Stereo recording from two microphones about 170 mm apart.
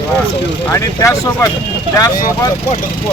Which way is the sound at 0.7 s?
20° left (ahead or behind).